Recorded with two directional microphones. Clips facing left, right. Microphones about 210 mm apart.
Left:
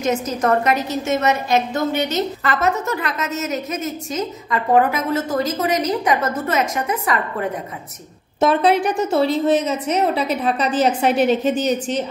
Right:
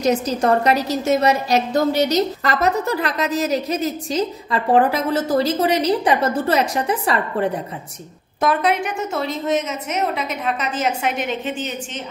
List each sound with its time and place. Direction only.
0.0 s a woman's voice: 35° right (ahead or behind)
8.4 s a woman's voice: 30° left (ahead or behind)